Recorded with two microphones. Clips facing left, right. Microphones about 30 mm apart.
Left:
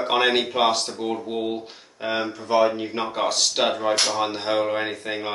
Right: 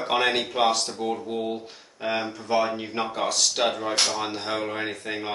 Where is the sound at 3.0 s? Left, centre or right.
Centre.